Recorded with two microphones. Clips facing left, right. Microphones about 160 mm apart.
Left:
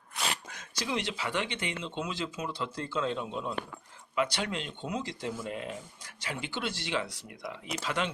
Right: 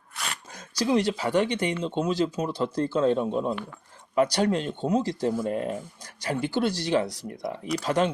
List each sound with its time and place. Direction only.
0.5 s speech: 35° right (ahead or behind)